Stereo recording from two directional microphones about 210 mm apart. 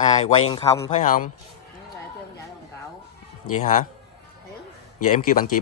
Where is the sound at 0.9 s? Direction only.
40° left (ahead or behind).